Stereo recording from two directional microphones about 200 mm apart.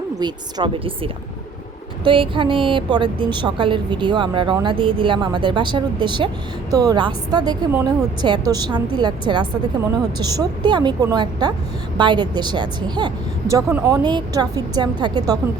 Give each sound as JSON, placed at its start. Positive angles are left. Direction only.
{"t": 0.2, "sound": "a woman's voice", "side_deg": -20}